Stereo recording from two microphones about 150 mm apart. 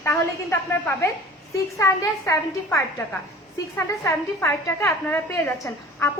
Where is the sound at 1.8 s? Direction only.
20° left (ahead or behind).